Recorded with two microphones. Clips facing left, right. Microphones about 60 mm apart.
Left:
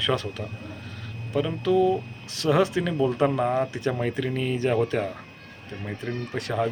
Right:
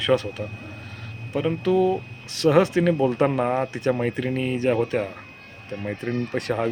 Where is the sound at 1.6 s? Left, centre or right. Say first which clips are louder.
Even; right.